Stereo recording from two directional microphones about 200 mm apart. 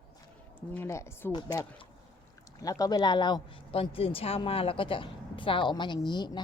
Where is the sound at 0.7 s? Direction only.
10° left (ahead or behind).